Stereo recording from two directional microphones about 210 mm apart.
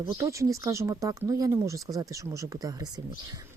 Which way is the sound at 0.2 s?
15° right (ahead or behind).